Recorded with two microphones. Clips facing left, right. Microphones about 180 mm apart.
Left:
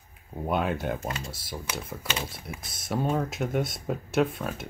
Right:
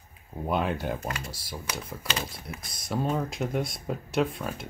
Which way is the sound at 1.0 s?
20° left (ahead or behind).